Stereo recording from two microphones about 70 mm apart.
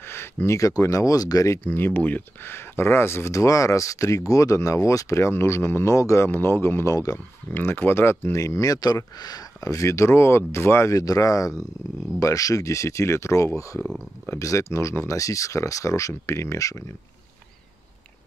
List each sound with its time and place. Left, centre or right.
0.0 s a sound: left
0.6 s speech: left
1.6 s speech: left
7.5 s speech: left
11.0 s speech: left